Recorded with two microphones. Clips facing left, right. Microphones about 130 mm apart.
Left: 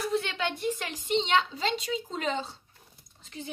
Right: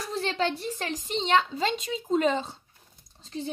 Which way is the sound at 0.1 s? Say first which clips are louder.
Right 2 dB; 35° right (ahead or behind).